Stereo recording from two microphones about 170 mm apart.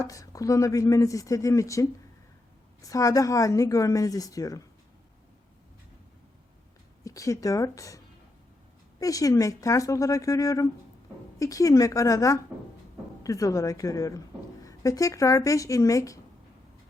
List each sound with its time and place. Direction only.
0.1 s speech: 20° left (ahead or behind)
7.0 s speech: 20° left (ahead or behind)